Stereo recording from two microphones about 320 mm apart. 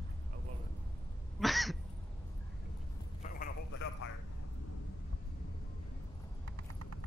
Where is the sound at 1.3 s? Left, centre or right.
Centre.